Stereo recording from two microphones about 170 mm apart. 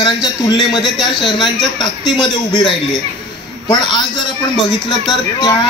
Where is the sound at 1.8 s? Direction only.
25° left (ahead or behind).